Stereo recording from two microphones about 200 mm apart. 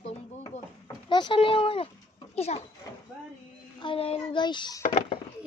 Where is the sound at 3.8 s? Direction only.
25° left (ahead or behind).